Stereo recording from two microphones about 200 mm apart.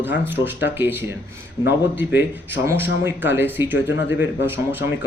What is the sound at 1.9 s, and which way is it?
Speech, 10° right (ahead or behind).